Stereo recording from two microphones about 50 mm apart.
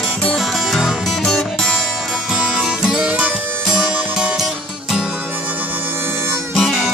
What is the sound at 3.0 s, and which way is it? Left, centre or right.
Music, right.